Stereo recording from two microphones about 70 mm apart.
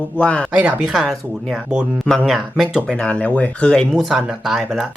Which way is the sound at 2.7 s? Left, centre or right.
Centre.